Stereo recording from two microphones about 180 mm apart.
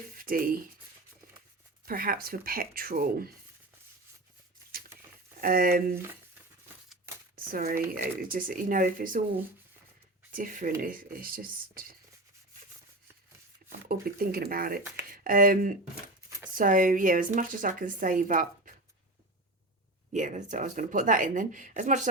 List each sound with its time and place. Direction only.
0.2 s speech: 55° right (ahead or behind)
1.8 s speech: 55° right (ahead or behind)
5.4 s speech: 55° right (ahead or behind)
7.3 s speech: 50° right (ahead or behind)
10.3 s speech: 50° right (ahead or behind)
13.7 s speech: 55° right (ahead or behind)
20.1 s speech: 45° right (ahead or behind)